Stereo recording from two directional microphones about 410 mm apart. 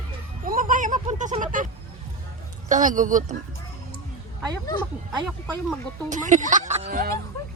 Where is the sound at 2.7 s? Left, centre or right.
Centre.